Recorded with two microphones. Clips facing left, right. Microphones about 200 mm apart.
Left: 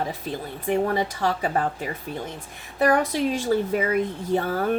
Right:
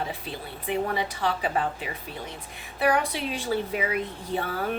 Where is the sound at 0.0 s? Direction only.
45° left (ahead or behind).